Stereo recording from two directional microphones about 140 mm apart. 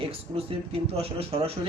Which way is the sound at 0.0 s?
45° right (ahead or behind).